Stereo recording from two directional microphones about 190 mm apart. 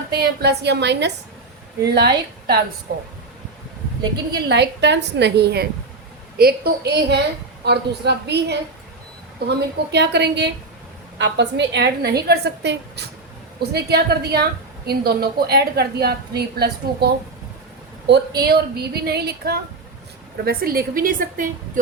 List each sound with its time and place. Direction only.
0.2 s a woman's voice: 60° right (ahead or behind)
4.0 s a woman's voice: 20° right (ahead or behind)
4.4 s a woman's voice: 65° right (ahead or behind)
9.6 s a woman's voice: 65° right (ahead or behind)
18.4 s a woman's voice: 55° right (ahead or behind)